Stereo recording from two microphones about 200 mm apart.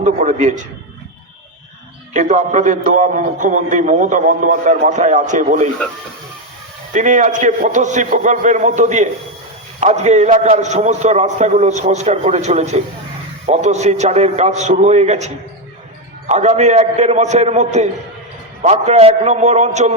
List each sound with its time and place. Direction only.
0.0 s a man's voice: 35° right (ahead or behind)
2.1 s a man's voice: 35° right (ahead or behind)
6.9 s a man's voice: 40° right (ahead or behind)